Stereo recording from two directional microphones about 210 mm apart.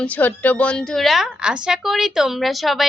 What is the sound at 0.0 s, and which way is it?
A woman's voice, 5° left (ahead or behind).